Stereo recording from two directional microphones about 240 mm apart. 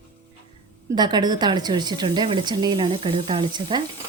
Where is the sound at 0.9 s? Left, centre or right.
Centre.